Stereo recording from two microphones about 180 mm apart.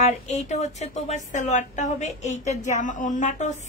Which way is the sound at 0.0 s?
40° left (ahead or behind).